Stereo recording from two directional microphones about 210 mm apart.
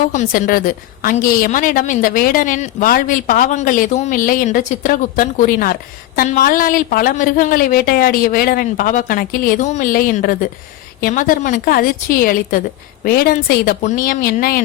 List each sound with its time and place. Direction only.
0.1 s a woman's voice: 35° left (ahead or behind)